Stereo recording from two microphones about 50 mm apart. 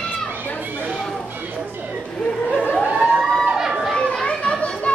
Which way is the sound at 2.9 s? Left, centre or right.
Right.